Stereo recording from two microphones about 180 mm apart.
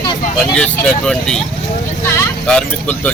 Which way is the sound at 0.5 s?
5° left (ahead or behind).